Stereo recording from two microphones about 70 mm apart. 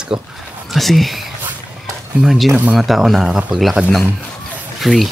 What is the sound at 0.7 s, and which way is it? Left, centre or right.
Speech, centre.